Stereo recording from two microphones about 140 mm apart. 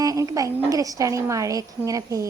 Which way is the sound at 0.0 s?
25° right (ahead or behind).